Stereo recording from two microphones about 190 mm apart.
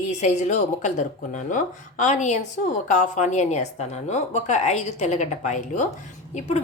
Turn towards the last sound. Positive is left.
turn(degrees=35)  # may be behind; listen again after turning